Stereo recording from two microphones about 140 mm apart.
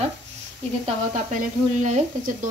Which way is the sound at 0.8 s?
60° right (ahead or behind).